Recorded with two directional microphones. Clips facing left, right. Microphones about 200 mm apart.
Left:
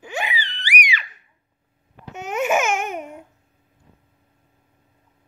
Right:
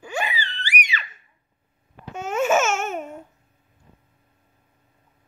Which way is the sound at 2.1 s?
20° left (ahead or behind).